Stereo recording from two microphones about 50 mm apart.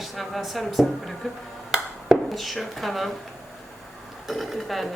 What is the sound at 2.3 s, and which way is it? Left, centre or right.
Speech, centre.